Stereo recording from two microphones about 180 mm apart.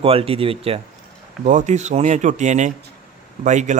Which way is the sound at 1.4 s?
40° right (ahead or behind).